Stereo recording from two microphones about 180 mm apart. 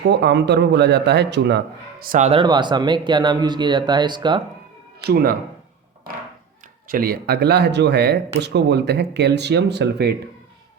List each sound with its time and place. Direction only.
0.1 s speech: 70° right (ahead or behind); by 4.4 s 25° right (ahead or behind)
5.0 s speech: 55° right (ahead or behind)
6.8 s speech: 55° right (ahead or behind); by 10.2 s 70° right (ahead or behind)